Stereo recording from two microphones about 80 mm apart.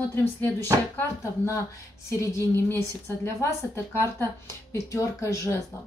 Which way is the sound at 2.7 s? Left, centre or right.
Left.